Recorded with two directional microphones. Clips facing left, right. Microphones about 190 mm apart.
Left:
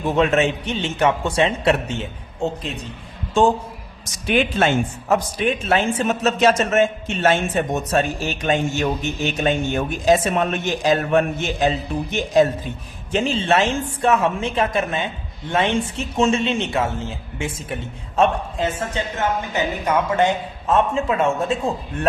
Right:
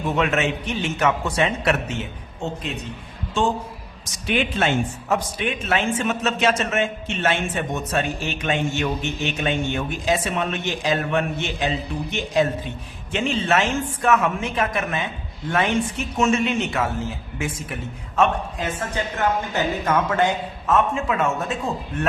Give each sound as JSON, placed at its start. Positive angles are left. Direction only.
{"t": 0.2, "sound": "a man's voice", "side_deg": 35}
{"t": 4.3, "sound": "a man's voice", "side_deg": 45}
{"t": 19.5, "sound": "speech", "side_deg": 20}